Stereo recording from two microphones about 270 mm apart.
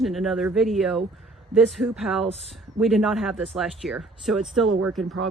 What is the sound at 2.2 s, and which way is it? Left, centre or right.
Speech, right.